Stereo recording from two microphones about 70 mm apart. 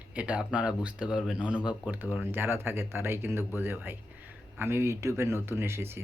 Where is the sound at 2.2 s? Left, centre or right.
Right.